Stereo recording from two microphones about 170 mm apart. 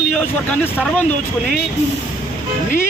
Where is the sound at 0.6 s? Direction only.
Centre (ahead or behind).